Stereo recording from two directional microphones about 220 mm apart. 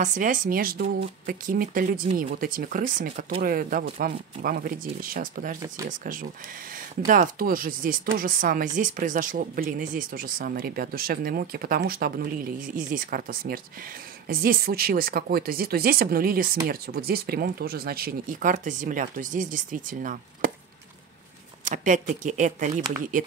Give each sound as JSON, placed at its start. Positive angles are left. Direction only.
{"t": 0.0, "sound": "speech", "side_deg": -35}
{"t": 21.6, "sound": "speech", "side_deg": -35}